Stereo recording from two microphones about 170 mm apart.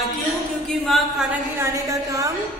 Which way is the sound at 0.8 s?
Centre (ahead or behind).